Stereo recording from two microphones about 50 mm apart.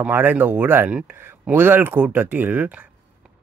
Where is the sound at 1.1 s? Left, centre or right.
Right.